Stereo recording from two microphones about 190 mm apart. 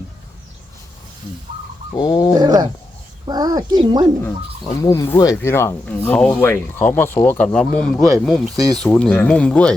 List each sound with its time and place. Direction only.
2.0 s speech: 20° left (ahead or behind)
2.4 s a sound: 20° right (ahead or behind)
3.2 s speech: 20° right (ahead or behind)
4.7 s speech: 15° left (ahead or behind)